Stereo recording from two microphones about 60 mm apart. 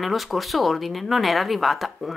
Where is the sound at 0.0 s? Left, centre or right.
Centre.